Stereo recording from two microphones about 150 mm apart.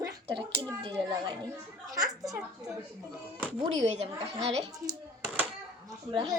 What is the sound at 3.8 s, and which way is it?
Speech, 45° right (ahead or behind).